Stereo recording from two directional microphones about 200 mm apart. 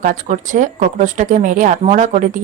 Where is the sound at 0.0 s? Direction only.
40° right (ahead or behind).